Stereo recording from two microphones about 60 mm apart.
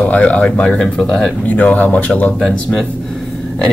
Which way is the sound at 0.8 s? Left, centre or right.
Centre.